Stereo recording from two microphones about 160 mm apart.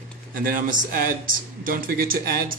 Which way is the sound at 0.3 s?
60° right (ahead or behind).